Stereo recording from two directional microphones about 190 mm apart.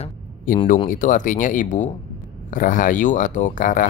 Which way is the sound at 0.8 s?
45° left (ahead or behind).